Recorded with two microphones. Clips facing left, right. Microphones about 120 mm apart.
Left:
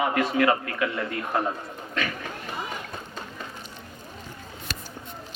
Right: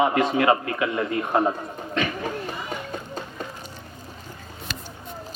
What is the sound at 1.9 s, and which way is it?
Chatter, 25° right (ahead or behind).